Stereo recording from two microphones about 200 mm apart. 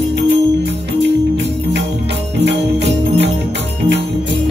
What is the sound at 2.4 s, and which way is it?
Music, 60° right (ahead or behind).